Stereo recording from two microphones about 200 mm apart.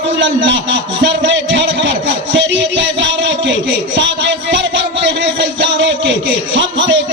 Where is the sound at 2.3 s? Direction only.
65° right (ahead or behind).